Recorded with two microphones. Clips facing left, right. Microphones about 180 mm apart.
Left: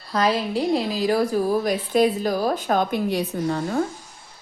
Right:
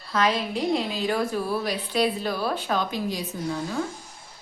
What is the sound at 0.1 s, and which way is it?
A woman's voice, 35° left (ahead or behind).